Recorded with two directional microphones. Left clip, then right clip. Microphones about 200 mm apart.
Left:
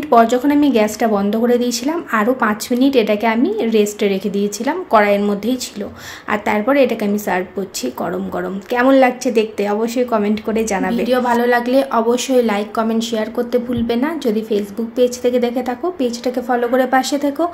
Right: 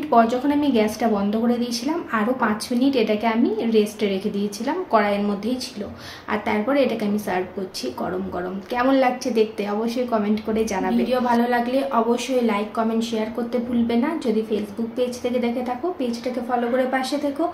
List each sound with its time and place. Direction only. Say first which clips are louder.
0.1 s a woman's voice: left 6 dB; 40° left (ahead or behind)
8.7 s a woman's voice: left 7 dB; 40° left (ahead or behind)
10.9 s a woman's voice: left 5 dB; 55° left (ahead or behind)
16.9 s a woman's voice: left 9 dB; 50° left (ahead or behind)